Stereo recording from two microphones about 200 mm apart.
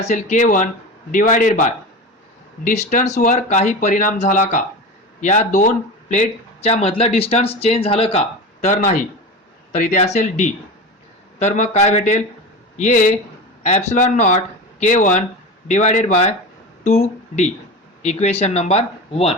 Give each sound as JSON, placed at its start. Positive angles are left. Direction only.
{"t": 0.0, "sound": "speech", "side_deg": 35}